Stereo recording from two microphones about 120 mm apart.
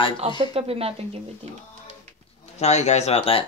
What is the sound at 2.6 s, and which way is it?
Speech, 70° left (ahead or behind).